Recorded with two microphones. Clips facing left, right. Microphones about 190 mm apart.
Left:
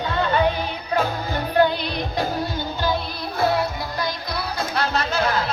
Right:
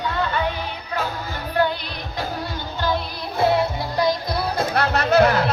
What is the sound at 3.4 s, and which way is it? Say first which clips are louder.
Music: right 2 dB; 25° right (ahead or behind).